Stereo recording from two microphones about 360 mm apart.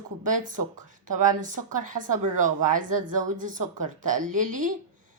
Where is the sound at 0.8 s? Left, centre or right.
Right.